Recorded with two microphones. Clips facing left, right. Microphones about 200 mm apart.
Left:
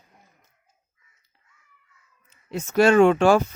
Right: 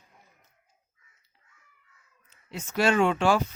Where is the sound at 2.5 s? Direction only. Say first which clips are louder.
Left 7 dB; 50° left (ahead or behind).